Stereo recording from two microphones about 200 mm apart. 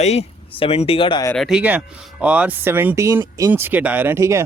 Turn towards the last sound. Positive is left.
turn(degrees=-15)  # may be behind; listen again after turning